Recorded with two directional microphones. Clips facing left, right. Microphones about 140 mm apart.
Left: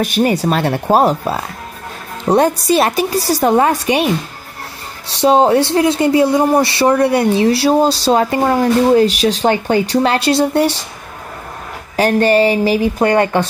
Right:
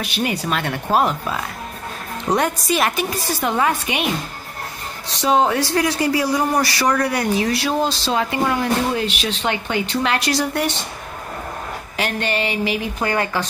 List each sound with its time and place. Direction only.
0.0 s speech: 45° left (ahead or behind); by 10.8 s 30° left (ahead or behind)
12.0 s speech: 40° left (ahead or behind)